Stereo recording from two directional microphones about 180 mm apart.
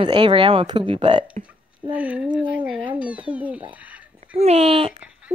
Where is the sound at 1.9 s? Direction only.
5° right (ahead or behind).